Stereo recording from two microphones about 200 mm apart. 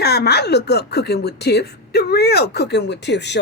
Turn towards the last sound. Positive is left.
turn(degrees=60)  # may be behind; listen again after turning